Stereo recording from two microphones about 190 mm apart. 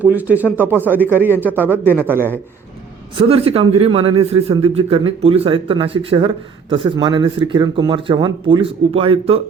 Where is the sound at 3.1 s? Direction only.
30° right (ahead or behind).